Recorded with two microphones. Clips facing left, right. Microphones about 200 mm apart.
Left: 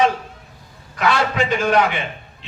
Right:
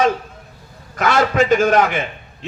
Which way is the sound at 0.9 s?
45° right (ahead or behind).